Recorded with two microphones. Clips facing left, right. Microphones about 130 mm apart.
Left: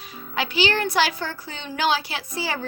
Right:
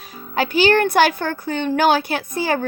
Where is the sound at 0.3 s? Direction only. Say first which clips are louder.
Right 7 dB; 45° right (ahead or behind).